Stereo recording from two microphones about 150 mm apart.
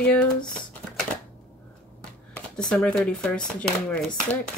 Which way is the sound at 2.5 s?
5° left (ahead or behind).